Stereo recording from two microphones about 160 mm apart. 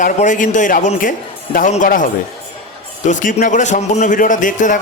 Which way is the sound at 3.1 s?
50° left (ahead or behind).